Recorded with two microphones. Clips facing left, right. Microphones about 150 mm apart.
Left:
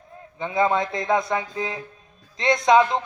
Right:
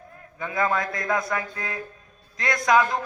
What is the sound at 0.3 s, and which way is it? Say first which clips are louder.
Music: left 4 dB; 25° left (ahead or behind).